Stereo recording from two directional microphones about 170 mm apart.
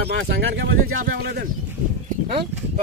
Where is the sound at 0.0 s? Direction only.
90° right.